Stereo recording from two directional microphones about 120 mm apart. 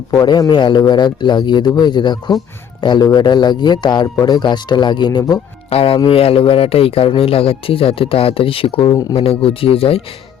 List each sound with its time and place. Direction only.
0.1 s a man's voice: 30° left (ahead or behind)
5.7 s speech: 50° left (ahead or behind)